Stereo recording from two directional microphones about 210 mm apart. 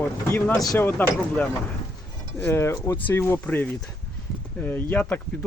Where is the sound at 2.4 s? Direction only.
10° left (ahead or behind).